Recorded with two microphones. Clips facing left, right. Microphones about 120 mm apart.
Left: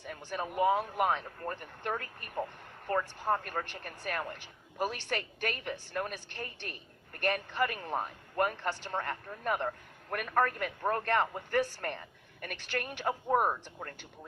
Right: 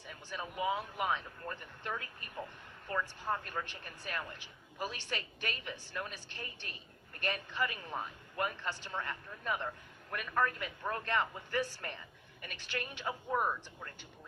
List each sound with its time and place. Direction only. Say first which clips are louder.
0.0 s speech: left 6 dB; 55° left (ahead or behind)